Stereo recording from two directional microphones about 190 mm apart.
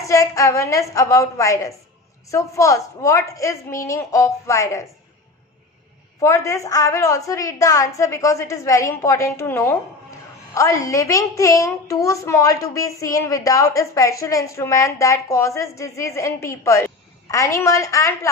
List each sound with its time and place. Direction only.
0.0 s a woman's voice: 15° left (ahead or behind)
6.2 s a woman's voice: 15° left (ahead or behind)